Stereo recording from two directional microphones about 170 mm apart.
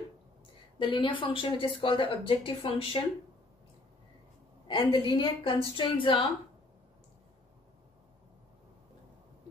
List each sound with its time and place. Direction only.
0.7 s a woman's voice: 25° left (ahead or behind)
4.6 s a woman's voice: 30° left (ahead or behind)